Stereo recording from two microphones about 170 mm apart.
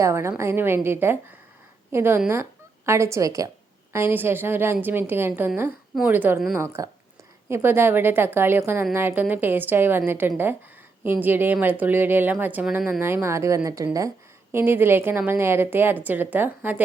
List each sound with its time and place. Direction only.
0.0 s a woman's voice: 15° right (ahead or behind)